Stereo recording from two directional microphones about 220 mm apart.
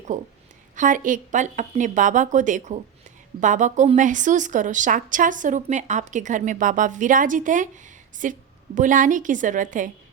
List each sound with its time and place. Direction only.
0.1 s a woman's voice: 35° right (ahead or behind)